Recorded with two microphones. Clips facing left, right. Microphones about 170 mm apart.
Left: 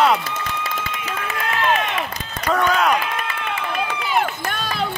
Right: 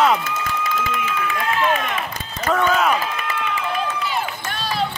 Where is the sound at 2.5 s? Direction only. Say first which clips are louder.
Even; 5° right (ahead or behind).